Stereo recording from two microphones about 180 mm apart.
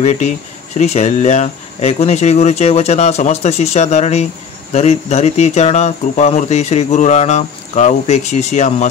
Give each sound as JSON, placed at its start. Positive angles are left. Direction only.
{"t": 0.7, "sound": "speech", "side_deg": 35}